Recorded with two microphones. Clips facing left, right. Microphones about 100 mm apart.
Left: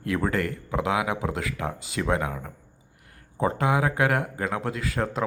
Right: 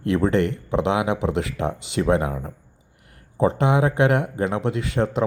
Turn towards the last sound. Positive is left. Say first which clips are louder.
# right 5 dB
turn(degrees=-25)  # may be behind; listen again after turning